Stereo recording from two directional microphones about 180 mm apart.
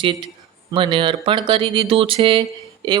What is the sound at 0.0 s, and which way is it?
Speech, 25° right (ahead or behind).